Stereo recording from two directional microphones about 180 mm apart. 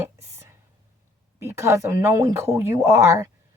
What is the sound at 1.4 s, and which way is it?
A woman's voice, 15° right (ahead or behind).